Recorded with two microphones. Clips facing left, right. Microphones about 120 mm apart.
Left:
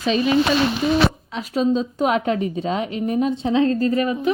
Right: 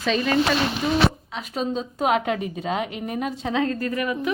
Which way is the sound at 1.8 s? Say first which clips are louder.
Left 2 dB; 35° left (ahead or behind).